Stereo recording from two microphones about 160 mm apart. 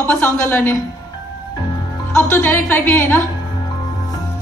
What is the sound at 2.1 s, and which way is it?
Speech, 15° left (ahead or behind).